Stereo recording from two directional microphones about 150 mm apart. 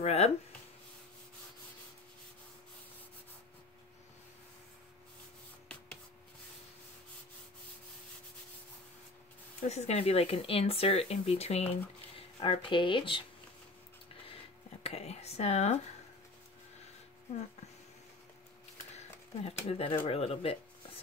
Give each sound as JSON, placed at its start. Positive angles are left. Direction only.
{"t": 0.0, "sound": "speech", "side_deg": 45}
{"t": 9.6, "sound": "speech", "side_deg": 45}
{"t": 14.3, "sound": "a sound", "side_deg": 45}
{"t": 19.4, "sound": "speech", "side_deg": 40}